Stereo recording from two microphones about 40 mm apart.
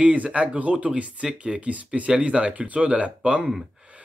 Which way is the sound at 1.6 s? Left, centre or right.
Right.